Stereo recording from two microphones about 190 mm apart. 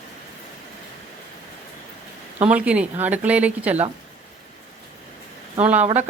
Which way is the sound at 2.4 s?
5° right (ahead or behind).